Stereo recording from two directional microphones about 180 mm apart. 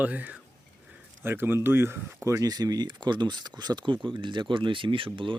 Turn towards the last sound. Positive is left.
turn(degrees=-30)  # may be behind; listen again after turning